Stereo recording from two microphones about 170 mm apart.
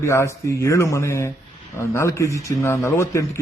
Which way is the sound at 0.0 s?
15° left (ahead or behind).